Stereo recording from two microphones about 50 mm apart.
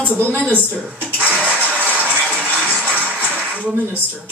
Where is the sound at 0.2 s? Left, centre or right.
Right.